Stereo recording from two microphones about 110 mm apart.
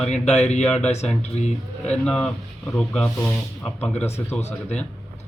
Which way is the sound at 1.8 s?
10° left (ahead or behind).